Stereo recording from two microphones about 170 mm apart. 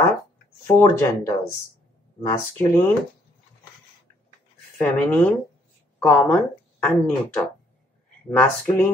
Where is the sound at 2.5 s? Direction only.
15° left (ahead or behind).